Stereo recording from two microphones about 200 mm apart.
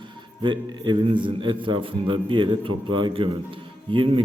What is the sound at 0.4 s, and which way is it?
A man's voice, 25° right (ahead or behind).